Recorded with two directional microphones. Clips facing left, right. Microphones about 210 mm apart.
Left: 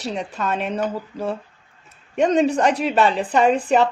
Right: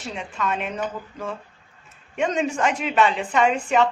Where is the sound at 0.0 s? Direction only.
40° left (ahead or behind).